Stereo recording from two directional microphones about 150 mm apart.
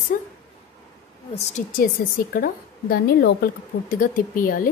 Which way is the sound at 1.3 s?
45° left (ahead or behind).